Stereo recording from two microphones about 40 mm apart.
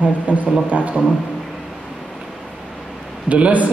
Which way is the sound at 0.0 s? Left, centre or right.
Right.